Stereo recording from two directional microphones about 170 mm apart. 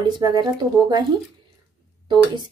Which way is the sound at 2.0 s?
25° right (ahead or behind).